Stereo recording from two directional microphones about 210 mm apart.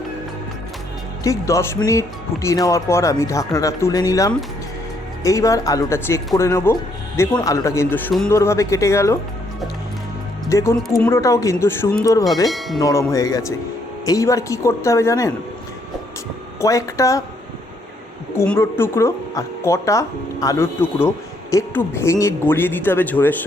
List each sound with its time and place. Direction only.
1.2 s speech: 15° left (ahead or behind)
10.5 s speech: 15° left (ahead or behind)
10.8 s a sound: centre (ahead or behind)
11.1 s speech: 15° left (ahead or behind)
12.5 s a sound: centre (ahead or behind)
12.8 s speech: 15° left (ahead or behind)
16.6 s speech: 15° left (ahead or behind)
18.3 s speech: 10° left (ahead or behind)